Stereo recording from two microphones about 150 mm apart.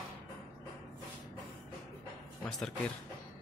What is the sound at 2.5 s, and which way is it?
Speech, 5° left (ahead or behind).